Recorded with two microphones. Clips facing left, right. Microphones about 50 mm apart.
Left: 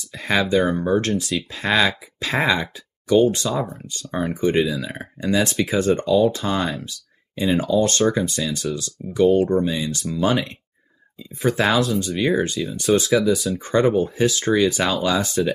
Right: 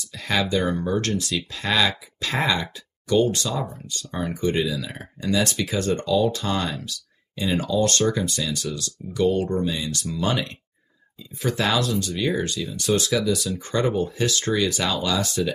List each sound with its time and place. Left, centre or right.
0.1 s speech: centre
12.1 s speech: left
13.0 s speech: centre
14.7 s speech: left